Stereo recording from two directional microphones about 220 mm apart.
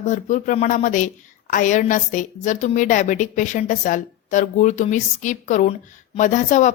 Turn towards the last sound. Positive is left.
turn(degrees=35)  # may be behind; listen again after turning